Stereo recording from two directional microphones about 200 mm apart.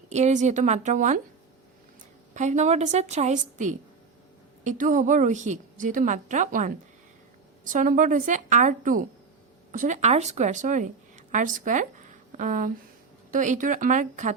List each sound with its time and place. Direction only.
0.1 s a woman's voice: 35° right (ahead or behind)
2.3 s a woman's voice: 35° right (ahead or behind)